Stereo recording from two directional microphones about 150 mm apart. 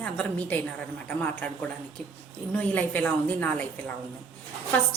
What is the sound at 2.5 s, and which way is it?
A woman's voice, 10° left (ahead or behind).